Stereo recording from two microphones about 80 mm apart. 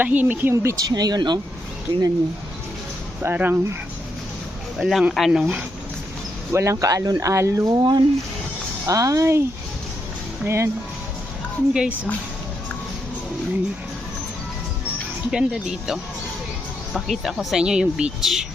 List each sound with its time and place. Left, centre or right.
0.0 s speech: right
0.5 s speech: right
0.9 s speech: right
1.9 s speech: right
3.2 s speech: right
4.8 s speech: centre
6.5 s speech: right
7.8 s speech: right
8.9 s speech: right
10.4 s speech: right
11.7 s speech: centre
15.3 s speech: centre
17.1 s speech: centre